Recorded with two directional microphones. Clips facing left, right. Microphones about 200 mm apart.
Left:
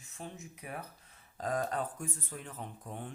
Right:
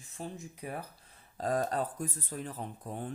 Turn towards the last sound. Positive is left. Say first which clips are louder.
# right 4 dB
turn(degrees=-35)  # may be behind; listen again after turning